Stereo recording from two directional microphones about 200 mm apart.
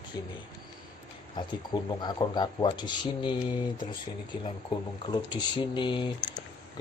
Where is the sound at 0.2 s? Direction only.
20° left (ahead or behind).